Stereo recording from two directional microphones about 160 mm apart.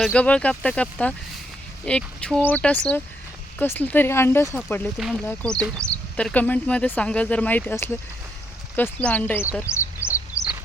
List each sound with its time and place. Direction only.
0.0 s speech: 5° left (ahead or behind)
4.9 s speech: centre (ahead or behind)
5.2 s speech: 10° left (ahead or behind)
9.6 s bird: 15° left (ahead or behind)